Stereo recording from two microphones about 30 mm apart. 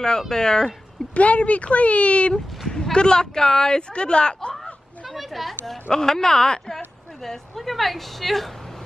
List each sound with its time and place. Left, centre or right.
0.3 s speech: centre
1.1 s speech: left
2.7 s speech: left
5.1 s a woman's voice: centre
5.9 s speech: centre
7.2 s a woman's voice: centre